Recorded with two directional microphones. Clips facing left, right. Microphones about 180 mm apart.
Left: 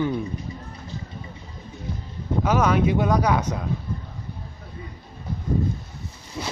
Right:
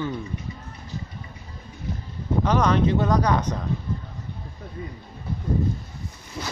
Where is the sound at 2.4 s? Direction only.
10° left (ahead or behind).